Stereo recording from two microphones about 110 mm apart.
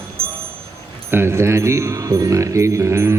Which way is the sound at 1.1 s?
20° right (ahead or behind).